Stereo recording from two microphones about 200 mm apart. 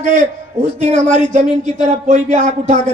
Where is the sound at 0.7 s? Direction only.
35° right (ahead or behind).